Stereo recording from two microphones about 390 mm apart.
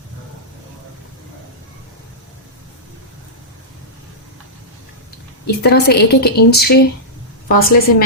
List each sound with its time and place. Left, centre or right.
5.5 s a woman's voice: left